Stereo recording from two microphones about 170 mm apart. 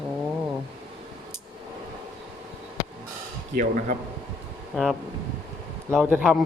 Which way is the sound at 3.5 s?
50° right (ahead or behind).